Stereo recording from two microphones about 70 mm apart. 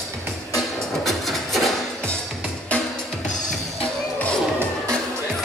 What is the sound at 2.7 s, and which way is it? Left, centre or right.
Music, centre.